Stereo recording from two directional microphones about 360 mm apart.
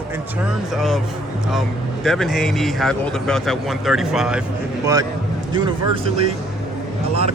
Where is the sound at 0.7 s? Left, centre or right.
Centre.